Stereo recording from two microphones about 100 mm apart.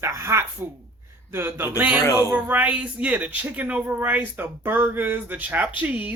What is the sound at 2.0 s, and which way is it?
Speech, 30° left (ahead or behind).